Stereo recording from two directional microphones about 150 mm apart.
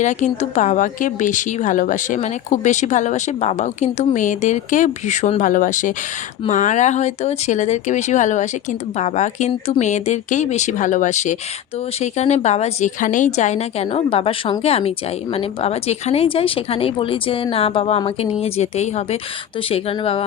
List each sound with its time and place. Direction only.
0.0 s a woman's voice: 55° left (ahead or behind)